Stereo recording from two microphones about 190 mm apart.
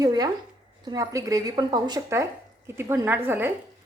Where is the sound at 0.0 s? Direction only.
20° right (ahead or behind).